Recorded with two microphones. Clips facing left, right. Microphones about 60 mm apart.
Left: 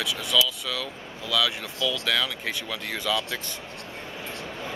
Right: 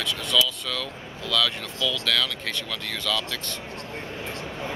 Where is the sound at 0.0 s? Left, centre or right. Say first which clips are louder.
Even; centre.